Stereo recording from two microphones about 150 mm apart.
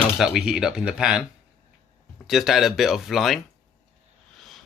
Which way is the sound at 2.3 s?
Centre (ahead or behind).